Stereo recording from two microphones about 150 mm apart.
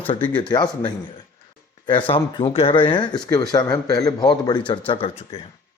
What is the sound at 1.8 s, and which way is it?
A man's voice, 35° left (ahead or behind).